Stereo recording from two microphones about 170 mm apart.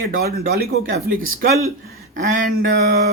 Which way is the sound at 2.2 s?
50° right (ahead or behind).